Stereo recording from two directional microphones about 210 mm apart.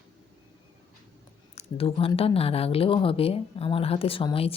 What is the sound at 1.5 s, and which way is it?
Speech, 25° left (ahead or behind).